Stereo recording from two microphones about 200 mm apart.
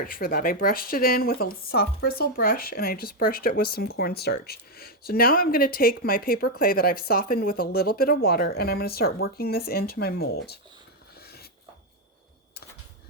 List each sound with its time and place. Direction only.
0.0 s speech: 45° left (ahead or behind)